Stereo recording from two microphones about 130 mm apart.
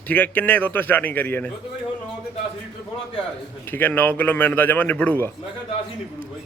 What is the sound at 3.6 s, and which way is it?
A man's voice, 15° left (ahead or behind).